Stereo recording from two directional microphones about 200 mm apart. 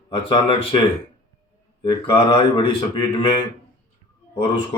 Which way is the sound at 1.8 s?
25° left (ahead or behind).